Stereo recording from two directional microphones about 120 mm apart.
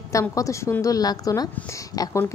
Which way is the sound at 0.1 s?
25° left (ahead or behind).